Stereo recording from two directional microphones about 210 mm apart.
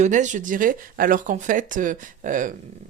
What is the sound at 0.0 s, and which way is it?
Speech, 35° right (ahead or behind).